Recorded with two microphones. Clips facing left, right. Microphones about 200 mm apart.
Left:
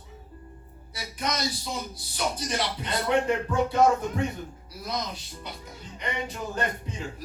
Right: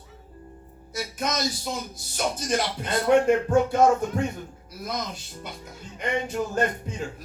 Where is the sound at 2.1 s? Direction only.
45° right (ahead or behind).